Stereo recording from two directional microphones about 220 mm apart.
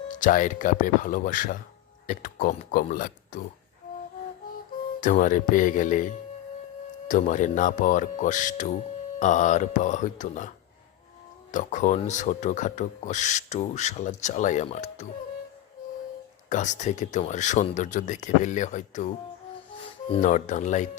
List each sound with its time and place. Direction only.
0.1 s speech: 35° left (ahead or behind)
4.9 s speech: 35° left (ahead or behind)
11.5 s speech: 35° left (ahead or behind)
16.5 s speech: 35° left (ahead or behind)